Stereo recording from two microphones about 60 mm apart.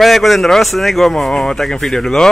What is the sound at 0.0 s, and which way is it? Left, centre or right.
Speech, centre.